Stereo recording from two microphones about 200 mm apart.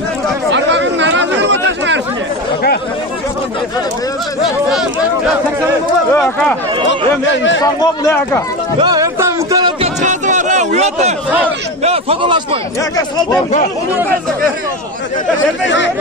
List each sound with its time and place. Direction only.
0.5 s chatter: 65° right (ahead or behind)
6.1 s speech: 5° left (ahead or behind)
7.2 s a man's voice: 70° left (ahead or behind)
7.6 s a man's voice: 15° left (ahead or behind)
8.7 s music: 20° right (ahead or behind)
10.0 s a sound: 35° right (ahead or behind)
15.6 s speech: 65° left (ahead or behind)